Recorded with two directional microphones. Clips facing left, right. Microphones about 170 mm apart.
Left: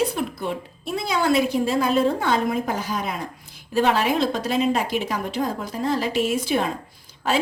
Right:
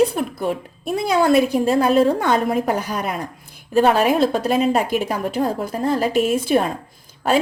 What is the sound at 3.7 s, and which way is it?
A woman's voice, 45° right (ahead or behind).